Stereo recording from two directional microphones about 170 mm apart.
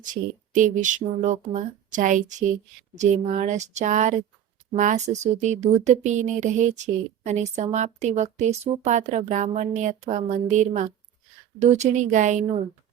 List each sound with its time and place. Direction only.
0.0 s speech: 50° right (ahead or behind)